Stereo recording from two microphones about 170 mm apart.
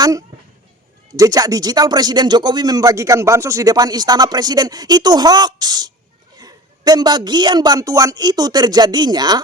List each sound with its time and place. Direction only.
0.0 s speech: 20° right (ahead or behind)